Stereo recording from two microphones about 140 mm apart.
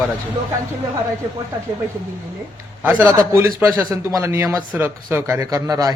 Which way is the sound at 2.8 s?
15° right (ahead or behind).